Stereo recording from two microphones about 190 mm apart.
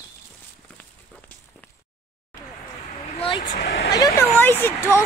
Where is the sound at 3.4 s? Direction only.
45° left (ahead or behind).